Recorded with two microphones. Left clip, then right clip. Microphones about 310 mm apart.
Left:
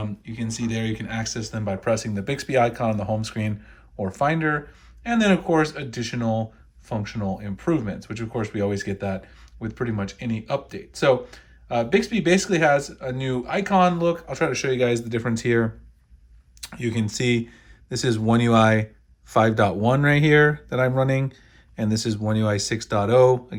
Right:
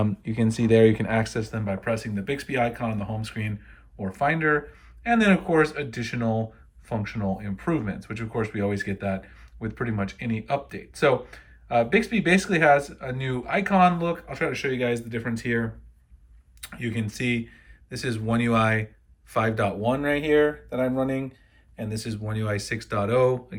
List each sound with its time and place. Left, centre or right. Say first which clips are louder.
0.0 s speech: right 6 dB; centre; by 20.7 s left
21.8 s speech: left 7 dB; centre